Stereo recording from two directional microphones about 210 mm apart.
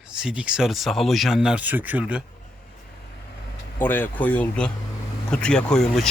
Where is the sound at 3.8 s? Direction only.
10° left (ahead or behind).